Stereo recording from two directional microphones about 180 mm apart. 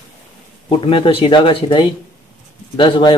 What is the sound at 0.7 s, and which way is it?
Speech, 30° left (ahead or behind).